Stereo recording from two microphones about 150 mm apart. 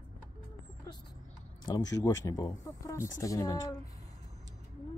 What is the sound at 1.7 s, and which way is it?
Speech, 25° left (ahead or behind).